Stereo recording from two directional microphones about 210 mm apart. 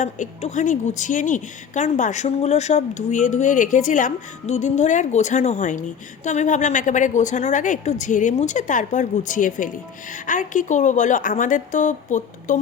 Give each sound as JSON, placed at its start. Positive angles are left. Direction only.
{"t": 0.0, "sound": "speech", "side_deg": 35}